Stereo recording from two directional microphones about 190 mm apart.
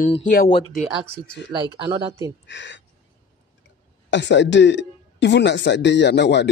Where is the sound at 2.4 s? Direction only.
70° left (ahead or behind).